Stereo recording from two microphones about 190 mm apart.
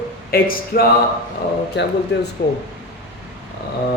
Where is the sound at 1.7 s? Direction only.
65° left (ahead or behind).